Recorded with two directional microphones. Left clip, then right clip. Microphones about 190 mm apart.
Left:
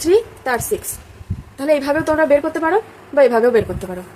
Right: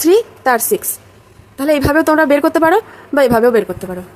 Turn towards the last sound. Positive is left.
turn(degrees=-25)  # may be behind; listen again after turning